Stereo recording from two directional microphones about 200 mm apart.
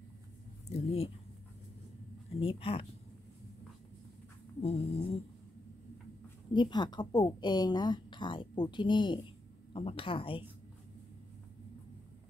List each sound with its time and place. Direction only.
0.7 s speech: 30° left (ahead or behind)
2.4 s speech: 25° left (ahead or behind)
4.6 s speech: 30° left (ahead or behind)
6.5 s speech: 20° left (ahead or behind)